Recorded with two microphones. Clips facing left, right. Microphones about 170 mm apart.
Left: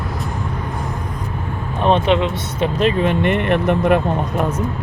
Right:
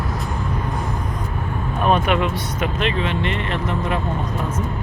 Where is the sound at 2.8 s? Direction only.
45° left (ahead or behind); by 3.9 s 60° left (ahead or behind).